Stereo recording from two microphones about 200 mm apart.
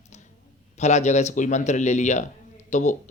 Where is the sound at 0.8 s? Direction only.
35° left (ahead or behind).